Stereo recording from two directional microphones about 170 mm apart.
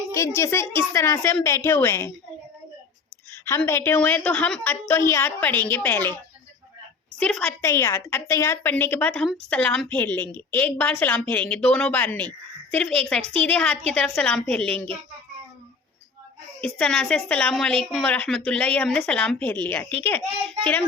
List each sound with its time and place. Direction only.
0.1 s a woman's voice: 15° left (ahead or behind)
3.3 s a woman's voice: 10° left (ahead or behind)
7.2 s a woman's voice: 5° left (ahead or behind)
16.6 s a woman's voice: 5° left (ahead or behind)